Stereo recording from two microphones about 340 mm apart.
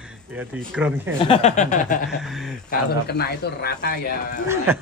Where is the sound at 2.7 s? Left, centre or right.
Left.